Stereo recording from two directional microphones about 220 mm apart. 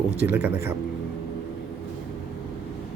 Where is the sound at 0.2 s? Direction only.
10° right (ahead or behind).